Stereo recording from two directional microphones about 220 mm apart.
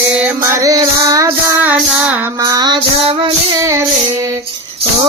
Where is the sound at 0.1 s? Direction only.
5° right (ahead or behind).